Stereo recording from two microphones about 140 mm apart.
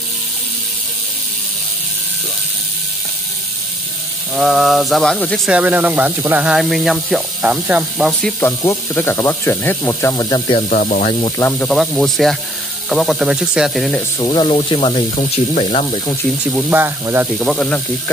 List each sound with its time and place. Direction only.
4.4 s speech: centre (ahead or behind)
5.5 s speech: 10° right (ahead or behind)
8.1 s speech: 5° left (ahead or behind)
8.4 s speech: 15° left (ahead or behind)
10.7 s speech: 70° left (ahead or behind)
11.1 s speech: 40° left (ahead or behind)
11.5 s speech: 10° left (ahead or behind)
14.2 s speech: 35° left (ahead or behind)
15.1 s speech: 50° left (ahead or behind)
16.4 s speech: 10° right (ahead or behind)
17.4 s speech: centre (ahead or behind)